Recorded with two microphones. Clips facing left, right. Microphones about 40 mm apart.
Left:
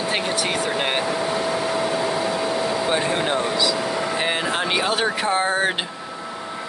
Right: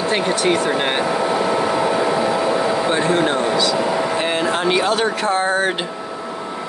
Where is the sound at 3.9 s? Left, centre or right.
Centre.